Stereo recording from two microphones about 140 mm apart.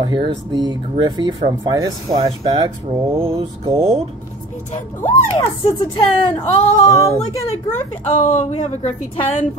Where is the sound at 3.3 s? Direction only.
35° right (ahead or behind).